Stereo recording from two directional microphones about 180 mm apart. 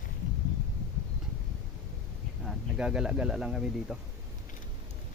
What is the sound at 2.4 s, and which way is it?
Speech, 5° right (ahead or behind).